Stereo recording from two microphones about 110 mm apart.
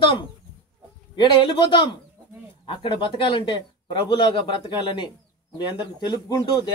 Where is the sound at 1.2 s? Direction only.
50° left (ahead or behind).